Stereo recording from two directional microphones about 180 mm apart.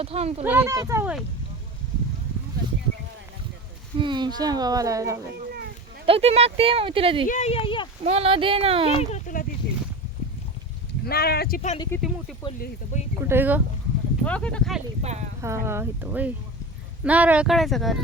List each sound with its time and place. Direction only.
0.0 s speech: 35° right (ahead or behind)
0.4 s speech: 10° right (ahead or behind)
3.9 s a child's voice: 25° right (ahead or behind)
6.1 s speech: 35° right (ahead or behind)
7.3 s speech: 40° left (ahead or behind)
8.0 s speech: 35° right (ahead or behind)
8.9 s a sound: 35° left (ahead or behind)
11.0 s speech: 60° left (ahead or behind)
11.9 s speech: 15° left (ahead or behind)
12.5 s speech: 55° left (ahead or behind)
13.2 s speech: 10° right (ahead or behind)
14.3 s speech: 5° left (ahead or behind)
15.0 s speech: 40° right (ahead or behind)
15.4 s speech: 15° right (ahead or behind); by 18.0 s centre (ahead or behind)